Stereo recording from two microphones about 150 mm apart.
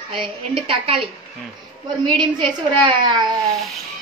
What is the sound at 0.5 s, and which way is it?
Speech, 35° right (ahead or behind).